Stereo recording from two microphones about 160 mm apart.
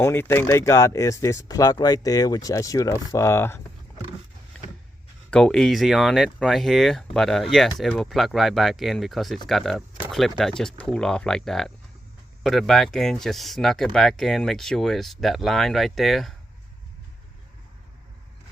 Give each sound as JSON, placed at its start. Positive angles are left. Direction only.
{"t": 0.0, "sound": "speech", "side_deg": 15}
{"t": 5.3, "sound": "speech", "side_deg": 5}